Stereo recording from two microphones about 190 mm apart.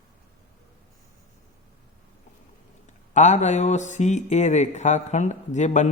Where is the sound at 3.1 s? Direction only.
35° left (ahead or behind).